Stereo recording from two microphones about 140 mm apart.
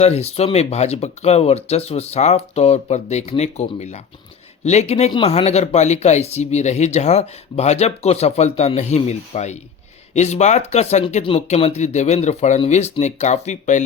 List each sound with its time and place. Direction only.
0.0 s speech: 50° left (ahead or behind)